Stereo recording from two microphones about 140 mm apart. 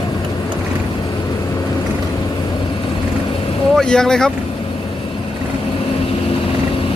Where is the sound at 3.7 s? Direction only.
5° left (ahead or behind).